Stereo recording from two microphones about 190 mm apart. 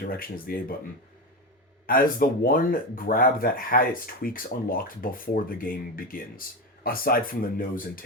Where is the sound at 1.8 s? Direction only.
50° left (ahead or behind).